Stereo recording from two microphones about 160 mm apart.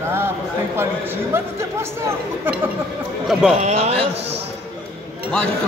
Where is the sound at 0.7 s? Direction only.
15° right (ahead or behind).